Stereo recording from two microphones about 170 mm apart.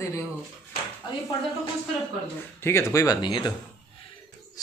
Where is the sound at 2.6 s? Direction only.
15° left (ahead or behind).